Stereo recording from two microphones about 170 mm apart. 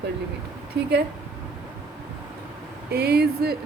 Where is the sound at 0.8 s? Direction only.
75° right (ahead or behind).